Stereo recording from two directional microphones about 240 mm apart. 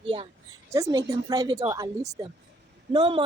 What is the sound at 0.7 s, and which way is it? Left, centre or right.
Speech, centre.